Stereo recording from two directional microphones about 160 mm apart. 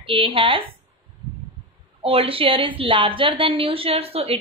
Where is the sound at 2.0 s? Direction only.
35° right (ahead or behind).